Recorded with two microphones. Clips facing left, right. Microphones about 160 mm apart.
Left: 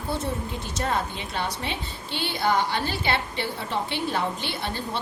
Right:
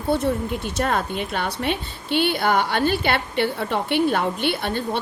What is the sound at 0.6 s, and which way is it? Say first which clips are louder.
A woman's voice: right 4 dB; 60° right (ahead or behind).